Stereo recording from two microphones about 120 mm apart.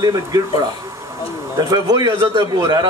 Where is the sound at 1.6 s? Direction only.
35° right (ahead or behind).